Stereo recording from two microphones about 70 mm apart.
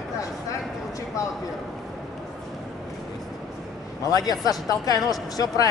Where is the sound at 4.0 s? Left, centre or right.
Left.